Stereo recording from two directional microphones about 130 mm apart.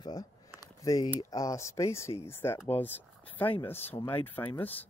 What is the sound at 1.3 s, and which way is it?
Speech, 25° left (ahead or behind).